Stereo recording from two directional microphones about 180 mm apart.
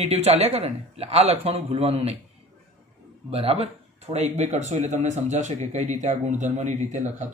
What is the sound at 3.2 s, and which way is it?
Speech, 35° right (ahead or behind).